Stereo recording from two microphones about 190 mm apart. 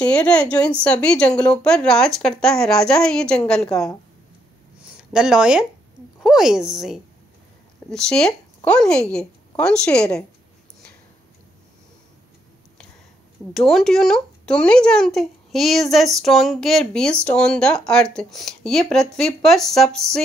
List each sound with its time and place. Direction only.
0.0 s a woman's voice: 5° left (ahead or behind)
5.1 s speech: 5° right (ahead or behind)
13.5 s speech: centre (ahead or behind)